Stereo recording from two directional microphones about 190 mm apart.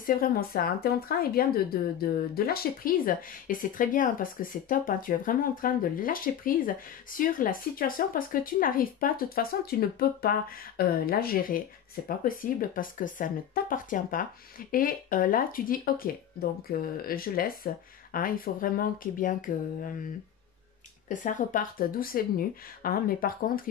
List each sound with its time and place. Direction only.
0.0 s speech: 50° left (ahead or behind)
21.1 s speech: 45° left (ahead or behind)